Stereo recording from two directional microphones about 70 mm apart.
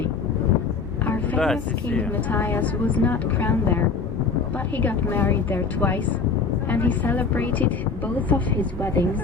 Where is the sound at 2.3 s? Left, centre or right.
Left.